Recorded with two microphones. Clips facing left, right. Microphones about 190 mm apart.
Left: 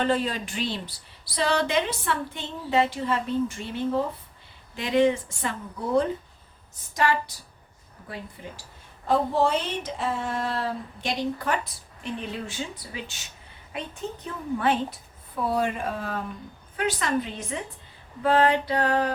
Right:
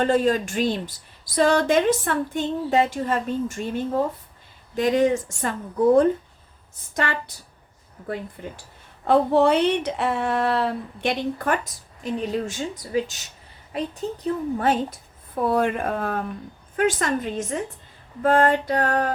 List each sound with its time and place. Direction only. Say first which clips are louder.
0.0 s a woman's voice: right 6 dB; 45° right (ahead or behind)
15.4 s a woman's voice: right 4 dB; 55° right (ahead or behind)